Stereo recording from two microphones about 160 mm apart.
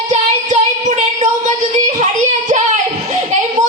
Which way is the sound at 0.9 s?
45° right (ahead or behind).